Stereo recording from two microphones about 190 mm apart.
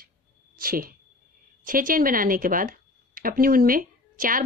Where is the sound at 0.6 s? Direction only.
50° right (ahead or behind).